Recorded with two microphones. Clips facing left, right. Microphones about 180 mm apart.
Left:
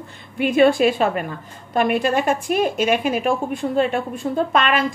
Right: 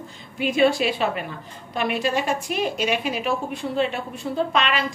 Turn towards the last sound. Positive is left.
turn(degrees=50)  # may be behind; listen again after turning